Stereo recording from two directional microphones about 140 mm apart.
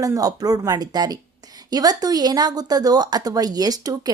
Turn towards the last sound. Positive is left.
turn(degrees=-25)  # may be behind; listen again after turning